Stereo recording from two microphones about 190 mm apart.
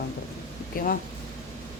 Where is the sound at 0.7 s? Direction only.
45° left (ahead or behind).